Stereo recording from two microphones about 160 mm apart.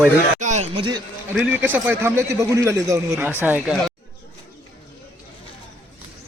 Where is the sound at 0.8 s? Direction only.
25° right (ahead or behind).